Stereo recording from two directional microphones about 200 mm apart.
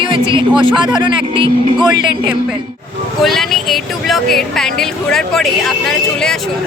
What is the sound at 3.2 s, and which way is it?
Speech, centre (ahead or behind).